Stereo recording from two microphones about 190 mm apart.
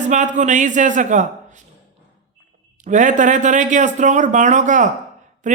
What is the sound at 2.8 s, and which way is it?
Speech, 40° right (ahead or behind).